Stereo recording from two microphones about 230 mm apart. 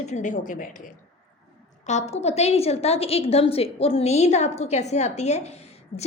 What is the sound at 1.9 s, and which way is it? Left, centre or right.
A woman's voice, left.